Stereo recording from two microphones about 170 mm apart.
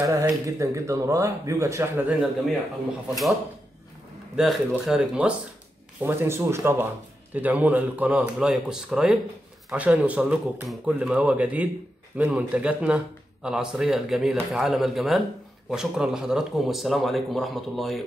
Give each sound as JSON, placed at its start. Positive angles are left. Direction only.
{"t": 0.0, "sound": "speech", "side_deg": -20}
{"t": 4.4, "sound": "a man's voice", "side_deg": 0}